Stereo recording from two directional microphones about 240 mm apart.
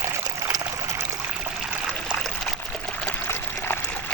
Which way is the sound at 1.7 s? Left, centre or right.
Centre.